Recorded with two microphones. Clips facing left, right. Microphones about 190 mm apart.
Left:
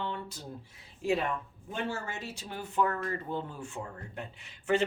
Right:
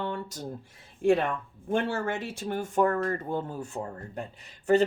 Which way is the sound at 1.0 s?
50° right (ahead or behind).